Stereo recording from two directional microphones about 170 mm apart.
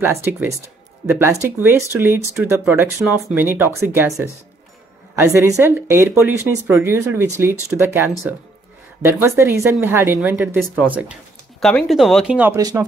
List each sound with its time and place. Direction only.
0.0 s speech: 15° right (ahead or behind)
11.6 s speech: centre (ahead or behind); by 12.8 s 15° right (ahead or behind)